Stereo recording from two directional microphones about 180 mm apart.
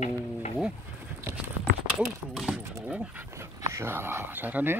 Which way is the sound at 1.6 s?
Centre (ahead or behind).